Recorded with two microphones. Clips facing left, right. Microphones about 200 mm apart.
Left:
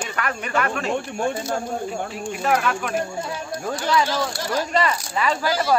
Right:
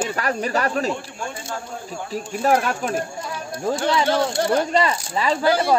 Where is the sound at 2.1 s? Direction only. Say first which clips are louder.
Right 5 dB; 35° right (ahead or behind).